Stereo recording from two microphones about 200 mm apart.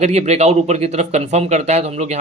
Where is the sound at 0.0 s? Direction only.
35° right (ahead or behind).